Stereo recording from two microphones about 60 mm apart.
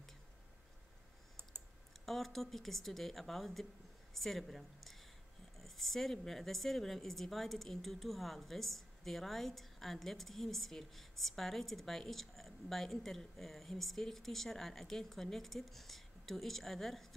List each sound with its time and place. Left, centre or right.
2.0 s a woman's voice: centre